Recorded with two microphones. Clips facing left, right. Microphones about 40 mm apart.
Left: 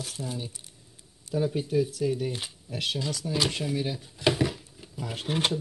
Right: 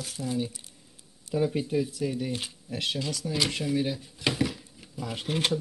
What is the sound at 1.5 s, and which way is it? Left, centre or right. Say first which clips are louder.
Speech: even; right.